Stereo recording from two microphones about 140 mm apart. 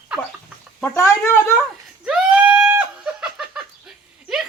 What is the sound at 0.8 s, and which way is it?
Speech, 15° left (ahead or behind).